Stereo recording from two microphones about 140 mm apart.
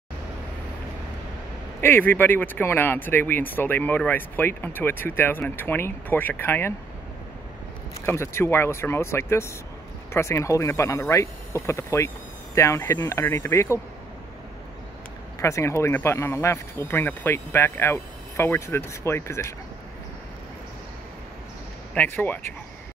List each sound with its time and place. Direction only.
1.8 s speech: 15° left (ahead or behind)
8.0 s speech: 20° left (ahead or behind)
15.4 s speech: 20° left (ahead or behind)
21.9 s speech: 15° left (ahead or behind)